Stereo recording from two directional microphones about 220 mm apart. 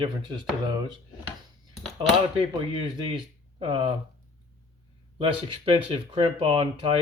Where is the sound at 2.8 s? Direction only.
25° right (ahead or behind).